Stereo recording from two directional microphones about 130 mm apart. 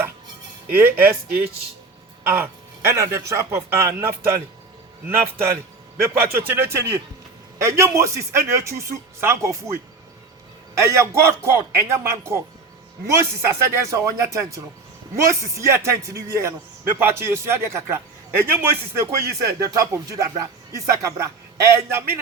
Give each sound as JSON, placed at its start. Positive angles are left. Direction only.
{"t": 0.7, "sound": "a man's voice", "side_deg": -15}
{"t": 10.8, "sound": "a man's voice", "side_deg": -20}